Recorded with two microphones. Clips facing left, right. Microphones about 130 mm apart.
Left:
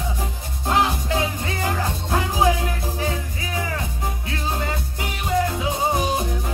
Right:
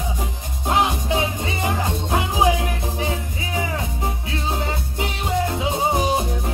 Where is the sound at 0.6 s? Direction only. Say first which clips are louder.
Right 1 dB; 15° right (ahead or behind).